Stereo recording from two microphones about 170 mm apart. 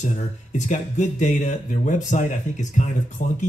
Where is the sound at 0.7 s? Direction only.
45° left (ahead or behind).